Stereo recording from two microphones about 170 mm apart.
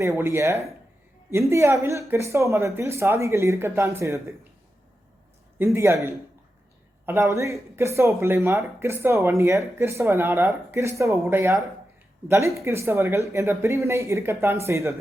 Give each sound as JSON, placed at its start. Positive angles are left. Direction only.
{"t": 0.0, "sound": "speech", "side_deg": -15}
{"t": 5.5, "sound": "speech", "side_deg": -15}